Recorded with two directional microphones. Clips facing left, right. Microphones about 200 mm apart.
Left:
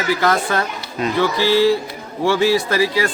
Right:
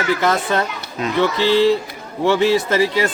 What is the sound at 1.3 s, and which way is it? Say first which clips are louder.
A man's voice: even; 25° right (ahead or behind).